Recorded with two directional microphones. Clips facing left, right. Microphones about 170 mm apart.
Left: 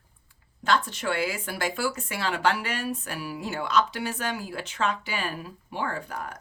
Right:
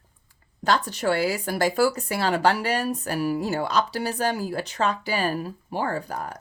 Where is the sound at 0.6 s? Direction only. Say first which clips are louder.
Right 3 dB; 40° right (ahead or behind).